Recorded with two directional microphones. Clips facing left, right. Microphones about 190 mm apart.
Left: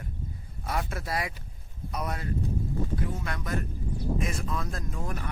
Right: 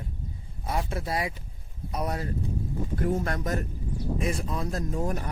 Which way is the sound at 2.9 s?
45° right (ahead or behind).